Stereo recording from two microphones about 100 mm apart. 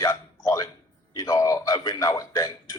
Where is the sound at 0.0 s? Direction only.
35° left (ahead or behind).